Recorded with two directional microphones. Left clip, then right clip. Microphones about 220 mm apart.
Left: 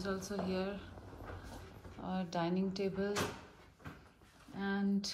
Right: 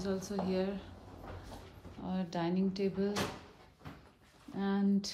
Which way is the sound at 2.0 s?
10° right (ahead or behind).